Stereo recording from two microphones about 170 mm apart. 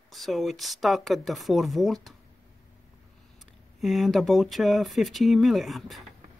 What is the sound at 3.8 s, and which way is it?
Speech, centre (ahead or behind).